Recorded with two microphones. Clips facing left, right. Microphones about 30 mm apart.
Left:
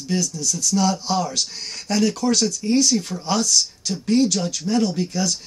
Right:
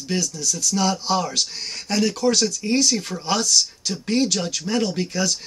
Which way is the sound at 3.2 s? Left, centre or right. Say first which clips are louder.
Right 2 dB; right.